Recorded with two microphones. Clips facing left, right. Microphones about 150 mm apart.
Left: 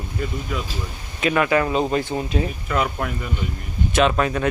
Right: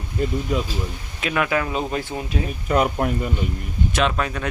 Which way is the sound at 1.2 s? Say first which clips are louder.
Left 4 dB; centre (ahead or behind).